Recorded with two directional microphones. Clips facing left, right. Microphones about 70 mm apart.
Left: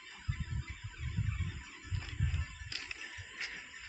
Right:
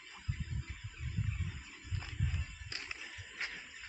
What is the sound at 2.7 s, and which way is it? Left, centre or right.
Music, right.